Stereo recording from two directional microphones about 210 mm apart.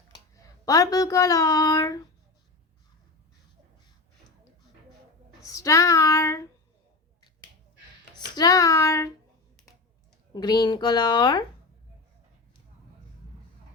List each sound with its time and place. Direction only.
0.3 s speech: 15° left (ahead or behind)
5.4 s speech: 15° left (ahead or behind)
8.4 s speech: 15° left (ahead or behind)
10.3 s speech: 20° left (ahead or behind)